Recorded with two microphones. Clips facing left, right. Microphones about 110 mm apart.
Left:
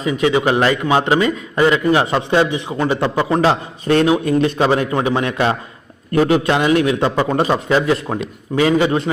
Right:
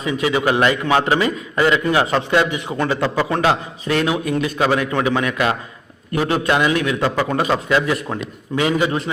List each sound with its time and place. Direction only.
0.2 s a man's voice: 25° left (ahead or behind)
3.3 s a man's voice: 30° left (ahead or behind)